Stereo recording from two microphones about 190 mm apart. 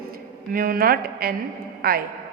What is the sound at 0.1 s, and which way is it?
A woman's voice, 50° right (ahead or behind).